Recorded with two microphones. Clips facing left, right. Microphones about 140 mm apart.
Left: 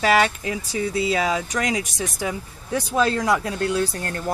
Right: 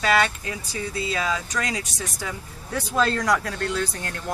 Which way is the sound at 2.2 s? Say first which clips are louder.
Left 6 dB; 10° left (ahead or behind).